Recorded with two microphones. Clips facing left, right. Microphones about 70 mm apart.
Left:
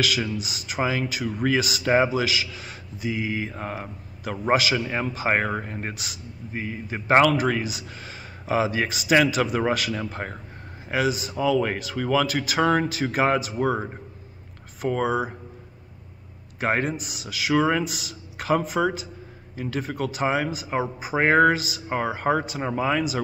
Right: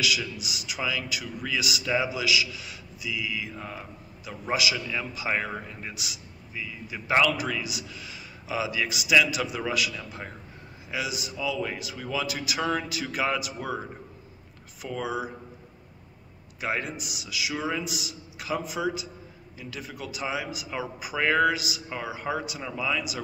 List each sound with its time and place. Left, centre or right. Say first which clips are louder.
0.0 s speech: left 4 dB; left
16.5 s speech: left 6 dB; left